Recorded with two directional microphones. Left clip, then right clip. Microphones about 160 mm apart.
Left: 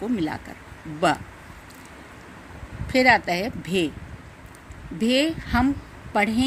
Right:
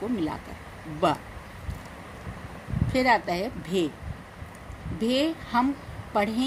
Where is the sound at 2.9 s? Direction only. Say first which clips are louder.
Left 5 dB; 50° left (ahead or behind).